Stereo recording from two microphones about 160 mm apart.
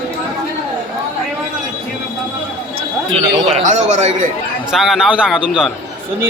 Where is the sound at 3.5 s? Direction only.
45° right (ahead or behind).